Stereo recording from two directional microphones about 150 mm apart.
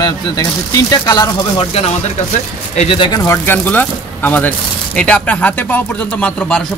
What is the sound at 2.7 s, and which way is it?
Speech, 45° left (ahead or behind).